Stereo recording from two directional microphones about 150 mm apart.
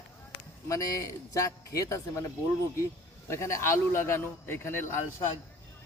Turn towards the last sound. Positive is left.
turn(degrees=15)  # may be behind; listen again after turning